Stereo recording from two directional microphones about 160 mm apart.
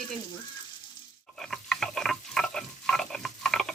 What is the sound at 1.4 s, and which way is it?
Stir, 5° left (ahead or behind).